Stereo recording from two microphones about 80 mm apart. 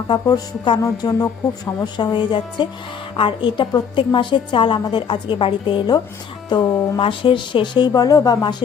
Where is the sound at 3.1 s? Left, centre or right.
Left.